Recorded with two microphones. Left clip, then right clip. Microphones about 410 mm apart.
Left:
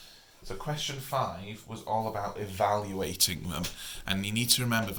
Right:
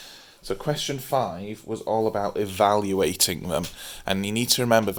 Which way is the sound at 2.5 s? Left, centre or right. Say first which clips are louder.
Right 7 dB; right.